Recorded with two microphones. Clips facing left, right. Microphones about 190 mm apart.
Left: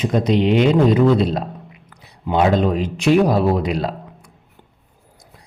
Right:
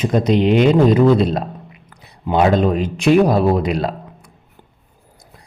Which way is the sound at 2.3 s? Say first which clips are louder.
Right 2 dB; 50° right (ahead or behind).